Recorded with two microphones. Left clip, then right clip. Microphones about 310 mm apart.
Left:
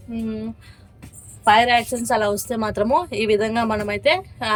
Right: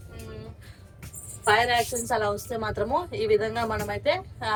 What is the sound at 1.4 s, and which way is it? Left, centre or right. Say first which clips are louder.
A woman's voice: left 7 dB; left.